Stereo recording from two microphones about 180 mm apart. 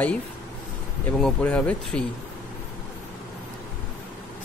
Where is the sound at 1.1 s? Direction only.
5° left (ahead or behind).